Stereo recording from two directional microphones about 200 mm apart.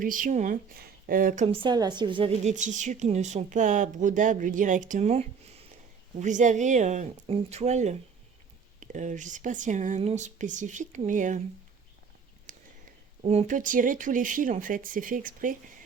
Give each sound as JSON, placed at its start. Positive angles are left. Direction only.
{"t": 0.0, "sound": "speech", "side_deg": -40}
{"t": 1.5, "sound": "a woman's voice", "side_deg": -20}
{"t": 12.5, "sound": "a sound", "side_deg": -40}
{"t": 13.2, "sound": "a woman's voice", "side_deg": -35}